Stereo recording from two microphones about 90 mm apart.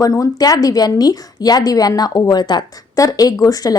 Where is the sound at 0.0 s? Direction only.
40° left (ahead or behind).